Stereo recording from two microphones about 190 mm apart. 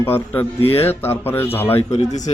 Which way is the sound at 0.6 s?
30° left (ahead or behind).